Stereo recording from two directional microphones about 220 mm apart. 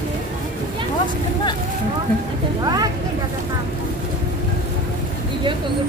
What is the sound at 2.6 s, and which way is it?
Vehicle, 15° right (ahead or behind).